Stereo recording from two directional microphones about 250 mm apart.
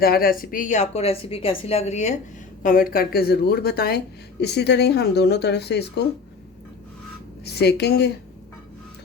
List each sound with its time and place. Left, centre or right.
0.0 s a woman's voice: left
7.4 s speech: left